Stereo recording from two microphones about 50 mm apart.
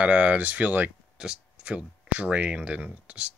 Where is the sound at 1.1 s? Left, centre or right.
Centre.